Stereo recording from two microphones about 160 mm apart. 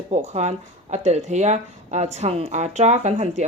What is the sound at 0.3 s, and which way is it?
Speech, 45° right (ahead or behind).